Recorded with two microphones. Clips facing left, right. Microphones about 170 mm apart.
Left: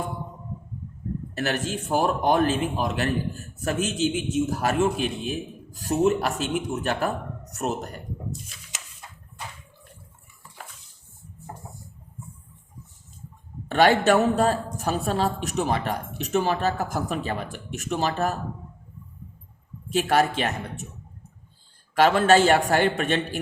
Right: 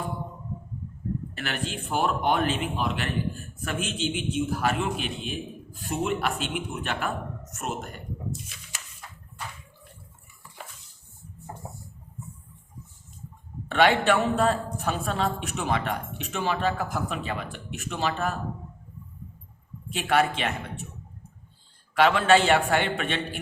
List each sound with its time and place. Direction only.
1.3 s a man's voice: 40° left (ahead or behind)
13.7 s a man's voice: 40° left (ahead or behind)
19.9 s a man's voice: 40° left (ahead or behind)
21.9 s a man's voice: 40° left (ahead or behind)